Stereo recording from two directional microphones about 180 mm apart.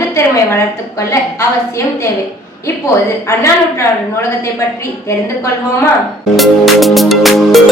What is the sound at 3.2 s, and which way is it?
Speech, 15° left (ahead or behind).